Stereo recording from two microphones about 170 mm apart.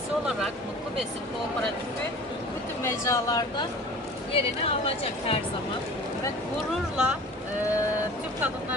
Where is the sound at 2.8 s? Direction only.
15° left (ahead or behind).